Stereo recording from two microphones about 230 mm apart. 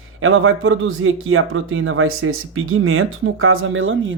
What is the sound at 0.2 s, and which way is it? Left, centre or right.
A man's voice, right.